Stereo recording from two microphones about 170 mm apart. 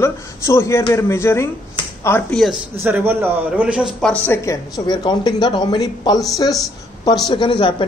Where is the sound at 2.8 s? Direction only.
10° right (ahead or behind).